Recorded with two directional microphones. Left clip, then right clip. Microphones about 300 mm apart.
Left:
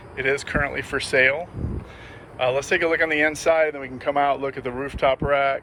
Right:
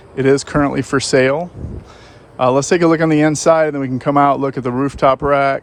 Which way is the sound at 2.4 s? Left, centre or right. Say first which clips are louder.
Right 8 dB; centre.